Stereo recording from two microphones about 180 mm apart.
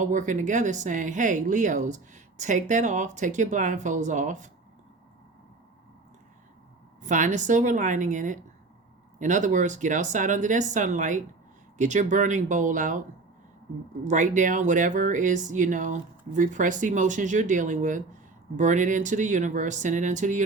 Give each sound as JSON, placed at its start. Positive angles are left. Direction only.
{"t": 0.0, "sound": "speech", "side_deg": -45}
{"t": 7.0, "sound": "speech", "side_deg": -45}
{"t": 14.0, "sound": "speech", "side_deg": -45}